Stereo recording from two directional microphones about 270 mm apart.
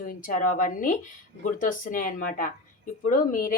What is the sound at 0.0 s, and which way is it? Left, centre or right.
Speech, left.